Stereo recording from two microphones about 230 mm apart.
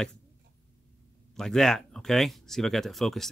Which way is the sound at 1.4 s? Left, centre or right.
Centre.